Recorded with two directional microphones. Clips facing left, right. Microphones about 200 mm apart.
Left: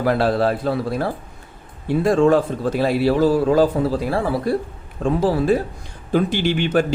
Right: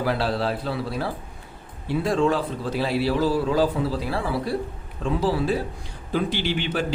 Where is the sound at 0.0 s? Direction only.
50° left (ahead or behind).